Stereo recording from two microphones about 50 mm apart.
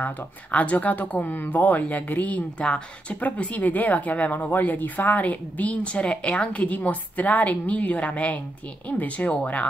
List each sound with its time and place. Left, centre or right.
0.0 s a woman's voice: left
2.6 s a woman's voice: left